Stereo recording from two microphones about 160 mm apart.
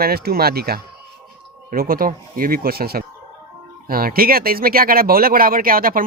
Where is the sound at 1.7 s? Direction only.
65° right (ahead or behind).